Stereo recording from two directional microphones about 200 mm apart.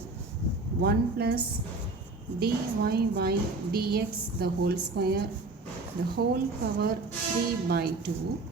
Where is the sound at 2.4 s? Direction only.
50° right (ahead or behind).